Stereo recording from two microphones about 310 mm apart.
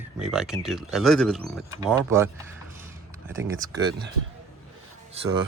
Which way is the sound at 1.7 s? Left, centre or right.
Centre.